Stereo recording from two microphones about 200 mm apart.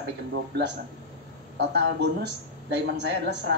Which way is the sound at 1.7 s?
55° right (ahead or behind).